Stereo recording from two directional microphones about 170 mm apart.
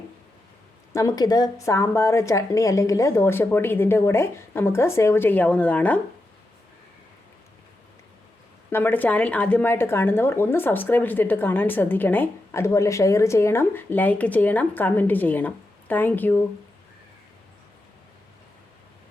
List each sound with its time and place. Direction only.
0.9 s speech: 20° left (ahead or behind)
8.7 s speech: 10° left (ahead or behind)